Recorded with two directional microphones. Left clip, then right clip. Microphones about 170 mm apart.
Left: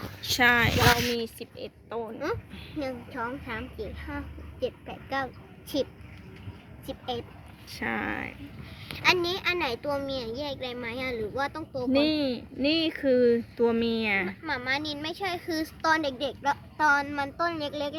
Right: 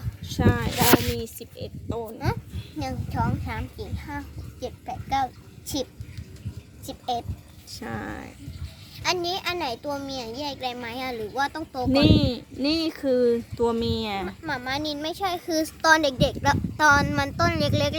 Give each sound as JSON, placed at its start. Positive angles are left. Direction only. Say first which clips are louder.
{"t": 0.2, "sound": "speech", "louder": "left 5 dB", "side_deg": -5}
{"t": 2.2, "sound": "a woman's voice", "louder": "right 1 dB", "side_deg": -50}
{"t": 6.8, "sound": "speech", "louder": "right 5 dB", "side_deg": -55}
{"t": 7.8, "sound": "speech", "louder": "left 4 dB", "side_deg": -10}
{"t": 9.0, "sound": "a child's voice", "louder": "left 1 dB", "side_deg": -55}
{"t": 11.9, "sound": "speech", "louder": "right 4 dB", "side_deg": -15}
{"t": 14.3, "sound": "a woman's voice", "louder": "even", "side_deg": -60}